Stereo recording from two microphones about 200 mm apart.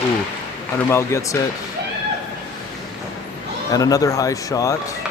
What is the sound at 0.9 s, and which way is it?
Speech, 15° left (ahead or behind).